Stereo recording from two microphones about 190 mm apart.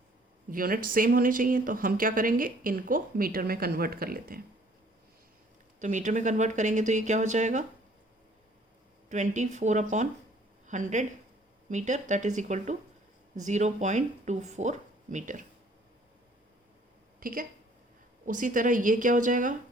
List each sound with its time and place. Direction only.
0.5 s speech: 50° right (ahead or behind)
5.8 s speech: 40° right (ahead or behind)
9.0 s speech: 40° right (ahead or behind)
17.2 s a woman's voice: 50° right (ahead or behind)